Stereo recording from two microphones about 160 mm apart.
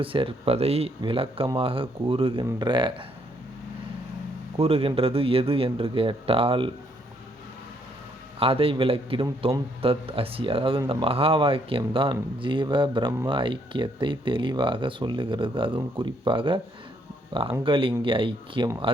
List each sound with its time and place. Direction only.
0.0 s speech: 35° right (ahead or behind)
4.5 s speech: 35° right (ahead or behind)
8.4 s speech: 35° right (ahead or behind)
17.6 s speech: 35° right (ahead or behind)